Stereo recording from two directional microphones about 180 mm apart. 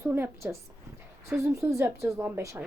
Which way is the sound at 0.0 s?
15° right (ahead or behind).